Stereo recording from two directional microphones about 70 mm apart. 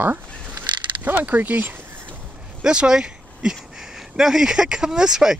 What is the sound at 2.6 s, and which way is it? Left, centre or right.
Speech, centre.